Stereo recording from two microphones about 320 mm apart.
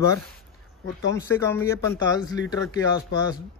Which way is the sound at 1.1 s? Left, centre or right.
Centre.